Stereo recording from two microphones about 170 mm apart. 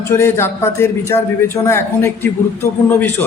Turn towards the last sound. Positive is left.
turn(degrees=10)  # may be behind; listen again after turning